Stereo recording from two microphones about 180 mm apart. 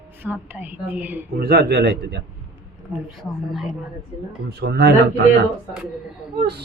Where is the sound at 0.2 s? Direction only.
10° right (ahead or behind).